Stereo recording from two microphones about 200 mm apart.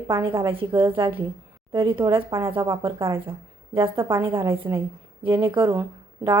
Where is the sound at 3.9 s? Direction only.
15° right (ahead or behind).